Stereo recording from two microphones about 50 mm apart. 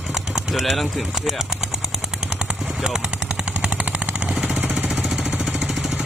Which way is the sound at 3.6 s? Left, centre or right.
Right.